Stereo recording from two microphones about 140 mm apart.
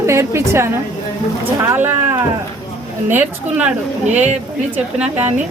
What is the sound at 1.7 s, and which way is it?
Speech, 15° right (ahead or behind).